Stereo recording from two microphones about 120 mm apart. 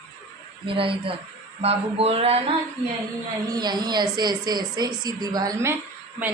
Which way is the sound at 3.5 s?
35° right (ahead or behind).